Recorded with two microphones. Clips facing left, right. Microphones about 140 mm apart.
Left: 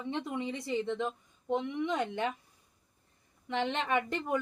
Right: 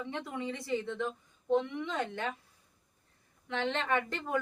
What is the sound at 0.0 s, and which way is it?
Speech, 20° left (ahead or behind).